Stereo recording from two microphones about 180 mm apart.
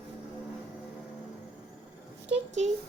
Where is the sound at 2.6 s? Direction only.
40° right (ahead or behind).